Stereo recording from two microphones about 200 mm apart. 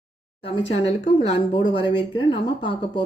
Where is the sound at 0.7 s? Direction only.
30° left (ahead or behind).